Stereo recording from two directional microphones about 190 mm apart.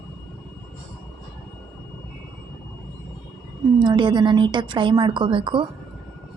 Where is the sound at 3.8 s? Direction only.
25° right (ahead or behind).